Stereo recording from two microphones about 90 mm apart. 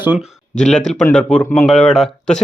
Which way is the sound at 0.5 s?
5° left (ahead or behind).